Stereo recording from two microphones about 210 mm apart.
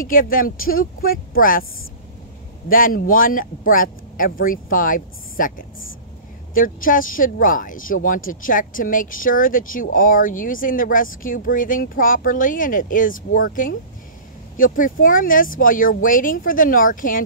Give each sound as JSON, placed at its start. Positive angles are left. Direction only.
{"t": 0.0, "sound": "a woman's voice", "side_deg": 40}
{"t": 2.7, "sound": "speech", "side_deg": 40}